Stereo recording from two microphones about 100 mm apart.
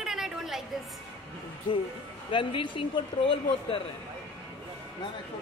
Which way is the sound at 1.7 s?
50° left (ahead or behind).